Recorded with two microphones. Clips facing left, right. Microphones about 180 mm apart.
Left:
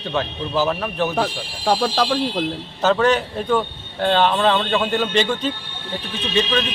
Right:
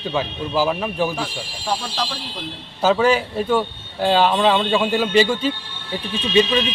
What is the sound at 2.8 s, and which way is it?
A man's voice, 10° right (ahead or behind).